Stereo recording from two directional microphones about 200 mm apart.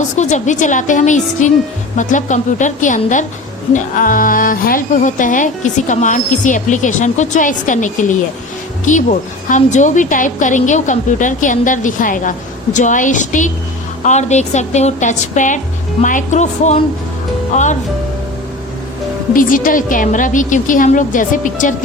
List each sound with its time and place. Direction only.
0.2 s a woman's voice: 35° left (ahead or behind)
19.3 s a woman's voice: 40° left (ahead or behind)